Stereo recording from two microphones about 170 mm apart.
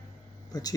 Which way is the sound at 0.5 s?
20° left (ahead or behind).